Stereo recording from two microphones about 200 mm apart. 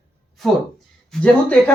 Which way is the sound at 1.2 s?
5° left (ahead or behind).